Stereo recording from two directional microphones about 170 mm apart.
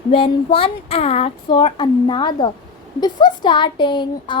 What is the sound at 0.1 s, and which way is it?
A woman's voice, 30° left (ahead or behind).